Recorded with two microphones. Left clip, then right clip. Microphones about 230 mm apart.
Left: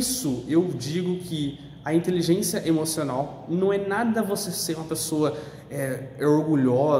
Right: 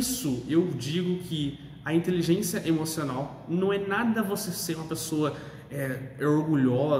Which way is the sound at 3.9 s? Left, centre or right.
Centre.